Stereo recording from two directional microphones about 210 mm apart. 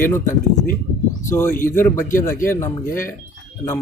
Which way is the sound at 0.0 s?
10° left (ahead or behind).